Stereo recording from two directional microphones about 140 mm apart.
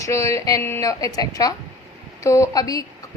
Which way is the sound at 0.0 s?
20° left (ahead or behind).